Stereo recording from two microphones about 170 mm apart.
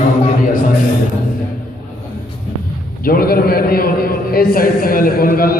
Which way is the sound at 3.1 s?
60° left (ahead or behind).